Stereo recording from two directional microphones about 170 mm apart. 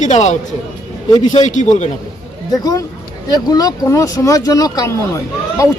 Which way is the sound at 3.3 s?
20° left (ahead or behind).